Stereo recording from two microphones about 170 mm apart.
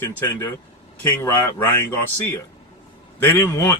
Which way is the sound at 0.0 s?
10° left (ahead or behind).